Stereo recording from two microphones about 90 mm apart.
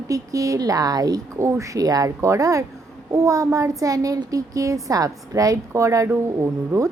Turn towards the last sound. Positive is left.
turn(degrees=-35)  # may be behind; listen again after turning